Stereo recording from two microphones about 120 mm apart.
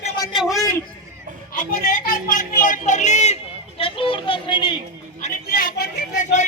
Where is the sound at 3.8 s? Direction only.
45° left (ahead or behind).